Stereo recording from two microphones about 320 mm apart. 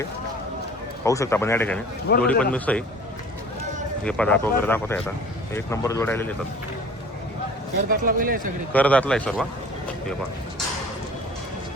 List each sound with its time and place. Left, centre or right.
1.0 s speech: centre
2.1 s a man's voice: left
2.4 s speech: centre
4.0 s speech: centre
7.9 s speech: right
8.7 s speech: centre